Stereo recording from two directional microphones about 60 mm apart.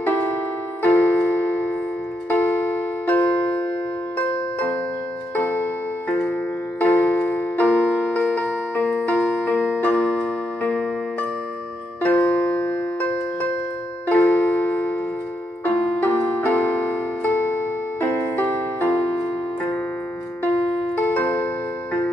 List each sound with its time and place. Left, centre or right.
0.0 s music: left
5.3 s music: left
12.3 s music: left
14.0 s music: left
20.9 s music: left